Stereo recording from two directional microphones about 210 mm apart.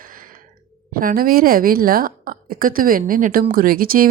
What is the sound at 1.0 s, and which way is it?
Speech, 40° right (ahead or behind).